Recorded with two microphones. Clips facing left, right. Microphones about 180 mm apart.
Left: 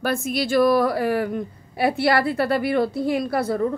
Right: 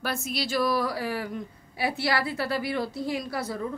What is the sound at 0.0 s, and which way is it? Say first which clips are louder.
A woman's voice: left 7 dB; 50° left (ahead or behind).